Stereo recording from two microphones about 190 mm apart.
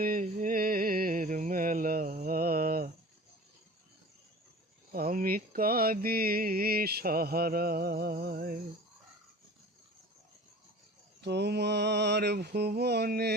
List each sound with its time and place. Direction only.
0.0 s a sound: 45° right (ahead or behind)
2.2 s mantra: 50° right (ahead or behind)
4.9 s mantra: 55° right (ahead or behind)
11.2 s mantra: 65° right (ahead or behind)